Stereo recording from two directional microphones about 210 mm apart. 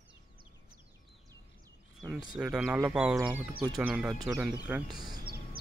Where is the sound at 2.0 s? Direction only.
5° right (ahead or behind).